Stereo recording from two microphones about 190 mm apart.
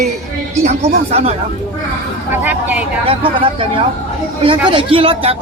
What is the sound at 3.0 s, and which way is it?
Speech, 30° right (ahead or behind).